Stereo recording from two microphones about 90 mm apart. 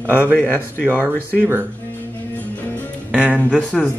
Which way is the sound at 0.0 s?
15° right (ahead or behind).